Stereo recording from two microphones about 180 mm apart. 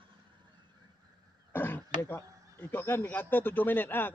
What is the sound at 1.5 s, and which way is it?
Speech, 10° left (ahead or behind).